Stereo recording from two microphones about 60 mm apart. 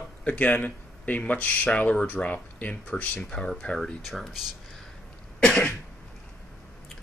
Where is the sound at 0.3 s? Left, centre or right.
Left; by 4.4 s centre.